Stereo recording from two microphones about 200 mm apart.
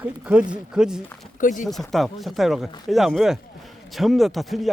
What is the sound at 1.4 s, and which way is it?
Speech, 40° left (ahead or behind).